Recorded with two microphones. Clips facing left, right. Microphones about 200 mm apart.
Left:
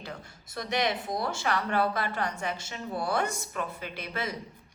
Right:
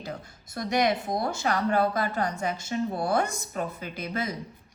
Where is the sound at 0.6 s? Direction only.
45° right (ahead or behind).